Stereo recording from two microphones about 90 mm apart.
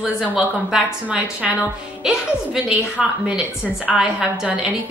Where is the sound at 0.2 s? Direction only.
5° right (ahead or behind).